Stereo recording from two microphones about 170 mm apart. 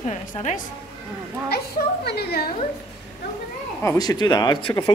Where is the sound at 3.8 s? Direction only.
20° left (ahead or behind).